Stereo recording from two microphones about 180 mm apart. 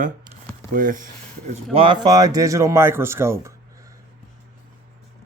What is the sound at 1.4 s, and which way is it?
Speech, 30° right (ahead or behind).